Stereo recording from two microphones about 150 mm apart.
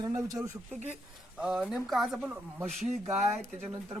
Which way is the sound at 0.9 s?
5° right (ahead or behind).